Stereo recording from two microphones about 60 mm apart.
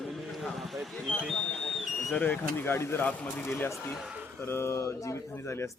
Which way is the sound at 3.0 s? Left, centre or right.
Left.